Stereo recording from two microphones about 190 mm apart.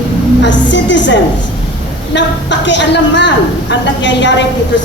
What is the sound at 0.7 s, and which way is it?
Speech, 70° left (ahead or behind).